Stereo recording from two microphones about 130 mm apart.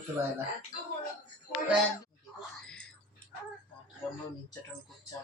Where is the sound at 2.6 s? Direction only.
5° left (ahead or behind).